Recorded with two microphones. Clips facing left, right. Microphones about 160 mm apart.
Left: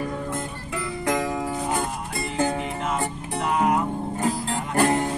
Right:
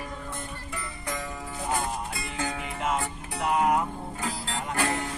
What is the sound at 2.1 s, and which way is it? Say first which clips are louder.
Music: left 8 dB; 50° left (ahead or behind).